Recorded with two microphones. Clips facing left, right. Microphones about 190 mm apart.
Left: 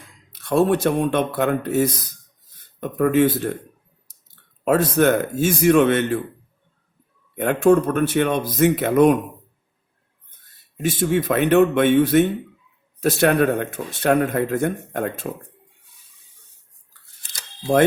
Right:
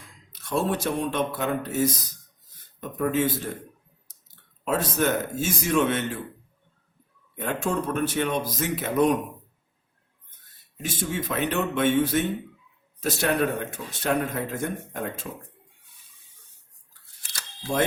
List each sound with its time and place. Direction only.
0.4 s speech: 60° left (ahead or behind)
4.6 s speech: 60° left (ahead or behind)
7.3 s speech: 60° left (ahead or behind)
10.8 s speech: 60° left (ahead or behind)
17.7 s speech: 55° left (ahead or behind)